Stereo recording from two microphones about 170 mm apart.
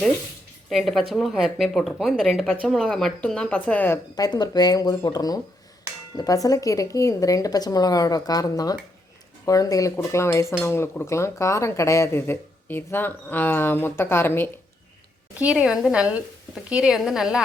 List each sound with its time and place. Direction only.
0.7 s speech: centre (ahead or behind)
4.1 s speech: 25° left (ahead or behind)
15.4 s speech: 5° right (ahead or behind)